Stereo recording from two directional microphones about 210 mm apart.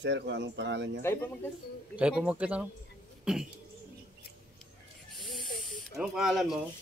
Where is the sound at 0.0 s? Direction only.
55° right (ahead or behind).